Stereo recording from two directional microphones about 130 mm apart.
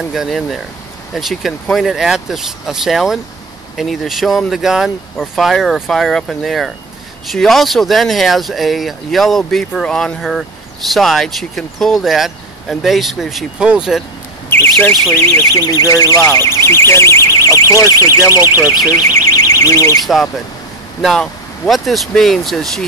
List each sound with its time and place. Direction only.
0.1 s speech: centre (ahead or behind)
14.5 s speech: 15° left (ahead or behind)
21.0 s speech: centre (ahead or behind)